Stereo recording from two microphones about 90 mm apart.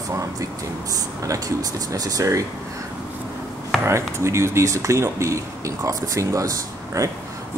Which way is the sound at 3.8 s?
30° right (ahead or behind).